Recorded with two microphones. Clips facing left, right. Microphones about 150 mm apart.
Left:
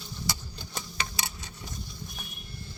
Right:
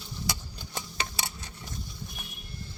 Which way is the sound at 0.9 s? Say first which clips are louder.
Even; 25° right (ahead or behind).